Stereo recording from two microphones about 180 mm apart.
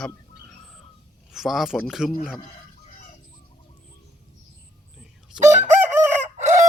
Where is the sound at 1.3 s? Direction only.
Centre (ahead or behind).